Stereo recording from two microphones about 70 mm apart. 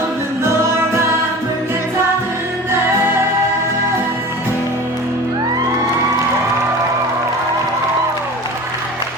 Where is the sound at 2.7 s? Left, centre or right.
Right.